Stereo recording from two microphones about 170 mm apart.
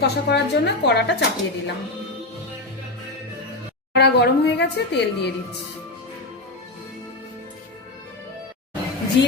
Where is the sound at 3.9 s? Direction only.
80° left.